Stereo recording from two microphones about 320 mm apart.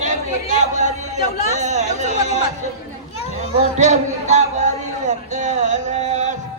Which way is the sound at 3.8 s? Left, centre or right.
Right.